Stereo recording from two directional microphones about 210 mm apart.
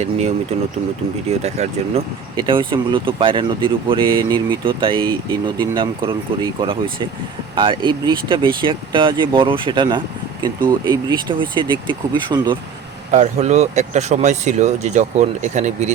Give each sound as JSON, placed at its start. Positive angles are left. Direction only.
{"t": 1.4, "sound": "speech", "side_deg": -30}
{"t": 13.1, "sound": "speech", "side_deg": -35}